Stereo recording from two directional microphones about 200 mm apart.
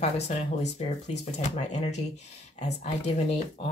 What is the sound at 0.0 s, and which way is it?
Speech, 35° left (ahead or behind).